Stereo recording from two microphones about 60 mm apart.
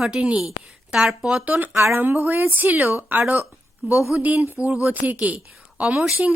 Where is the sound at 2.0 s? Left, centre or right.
Right.